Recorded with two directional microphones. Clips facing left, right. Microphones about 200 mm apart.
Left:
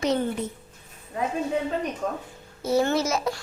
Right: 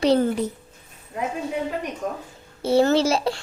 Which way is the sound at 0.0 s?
35° right (ahead or behind).